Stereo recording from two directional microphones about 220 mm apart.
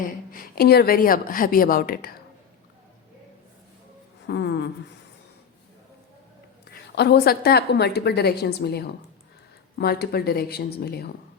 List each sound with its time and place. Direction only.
0.0 s a woman's voice: 40° left (ahead or behind)
4.3 s a sound: 50° left (ahead or behind)
6.9 s a woman's voice: 50° left (ahead or behind)